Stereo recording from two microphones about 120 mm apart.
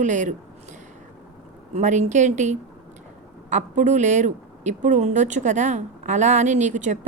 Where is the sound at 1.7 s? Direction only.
80° right.